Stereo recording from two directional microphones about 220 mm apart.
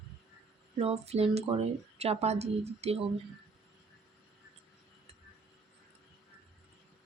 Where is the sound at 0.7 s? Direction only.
25° right (ahead or behind).